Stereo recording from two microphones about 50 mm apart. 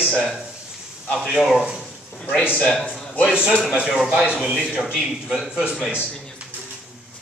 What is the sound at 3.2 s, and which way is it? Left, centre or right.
Speech, centre.